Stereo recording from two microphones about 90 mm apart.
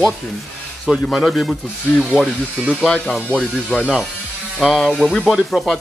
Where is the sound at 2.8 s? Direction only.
5° left (ahead or behind).